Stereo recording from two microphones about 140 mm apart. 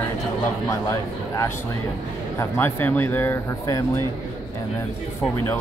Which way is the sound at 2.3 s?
15° left (ahead or behind).